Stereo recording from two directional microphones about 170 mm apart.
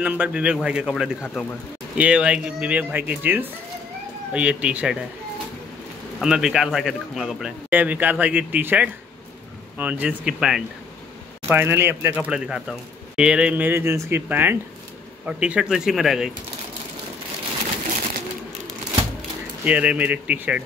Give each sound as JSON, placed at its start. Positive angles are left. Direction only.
{"t": 0.0, "sound": "speech", "side_deg": -10}
{"t": 1.2, "sound": "speech", "side_deg": 10}
{"t": 2.0, "sound": "speech", "side_deg": -5}
{"t": 6.2, "sound": "speech", "side_deg": -5}
{"t": 19.6, "sound": "speech", "side_deg": -10}